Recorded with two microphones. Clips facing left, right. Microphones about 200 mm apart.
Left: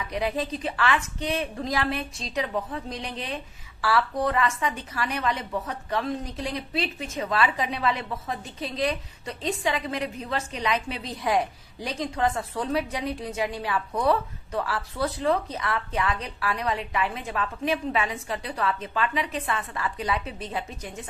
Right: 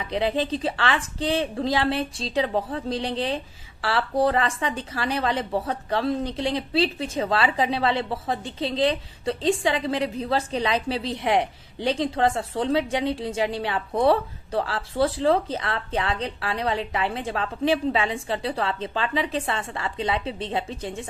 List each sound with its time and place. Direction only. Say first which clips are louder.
0.0 s a woman's voice: right 4 dB; 25° right (ahead or behind)